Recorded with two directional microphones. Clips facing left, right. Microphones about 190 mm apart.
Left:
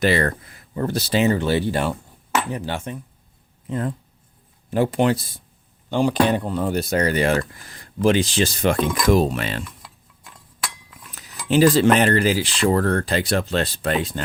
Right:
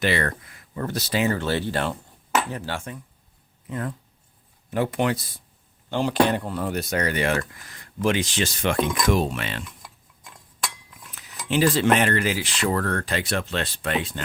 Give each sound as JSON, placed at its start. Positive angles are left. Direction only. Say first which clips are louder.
{"t": 0.0, "sound": "speech", "louder": "left 5 dB", "side_deg": 35}
{"t": 5.9, "sound": "speech", "louder": "left 3 dB", "side_deg": 15}
{"t": 11.1, "sound": "speech", "louder": "left 5 dB", "side_deg": 40}